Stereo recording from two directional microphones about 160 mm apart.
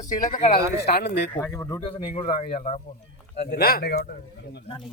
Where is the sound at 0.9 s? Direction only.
90° left.